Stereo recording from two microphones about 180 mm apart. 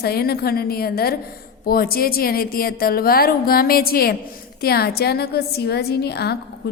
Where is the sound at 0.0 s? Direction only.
60° left (ahead or behind).